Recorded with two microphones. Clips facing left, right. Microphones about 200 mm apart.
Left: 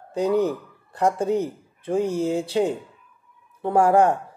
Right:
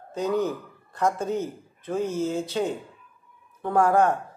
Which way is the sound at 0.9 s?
30° left (ahead or behind).